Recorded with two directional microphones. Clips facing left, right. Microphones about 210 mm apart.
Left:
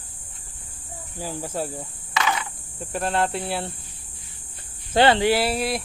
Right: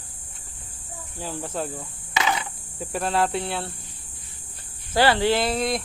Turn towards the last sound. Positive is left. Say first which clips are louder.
# even
turn(degrees=5)  # may be behind; listen again after turning